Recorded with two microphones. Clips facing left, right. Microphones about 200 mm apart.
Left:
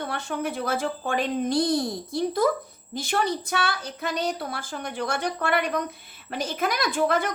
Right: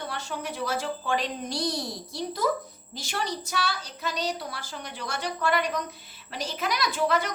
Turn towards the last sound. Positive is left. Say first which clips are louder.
# left 2 dB
turn(degrees=50)  # may be behind; listen again after turning